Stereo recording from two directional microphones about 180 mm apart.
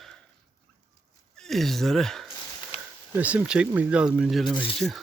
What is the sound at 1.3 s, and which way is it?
Speech, centre (ahead or behind).